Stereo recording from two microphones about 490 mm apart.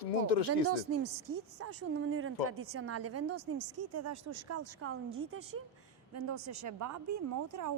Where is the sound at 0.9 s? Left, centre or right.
Right.